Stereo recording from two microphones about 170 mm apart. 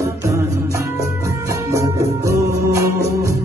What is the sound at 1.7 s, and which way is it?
Music, 15° right (ahead or behind).